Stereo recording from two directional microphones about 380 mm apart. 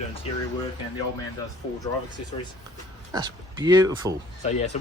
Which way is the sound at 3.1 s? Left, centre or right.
Centre.